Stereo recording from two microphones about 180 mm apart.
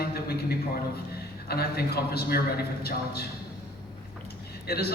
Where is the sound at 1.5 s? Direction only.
60° left (ahead or behind).